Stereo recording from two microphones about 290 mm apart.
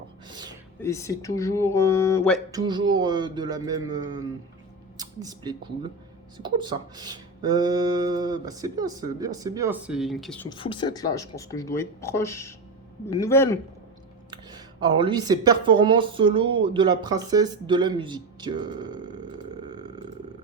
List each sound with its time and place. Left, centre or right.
0.3 s music: centre
0.8 s speech: centre
2.5 s speech: centre
10.5 s speech: centre
14.3 s speech: centre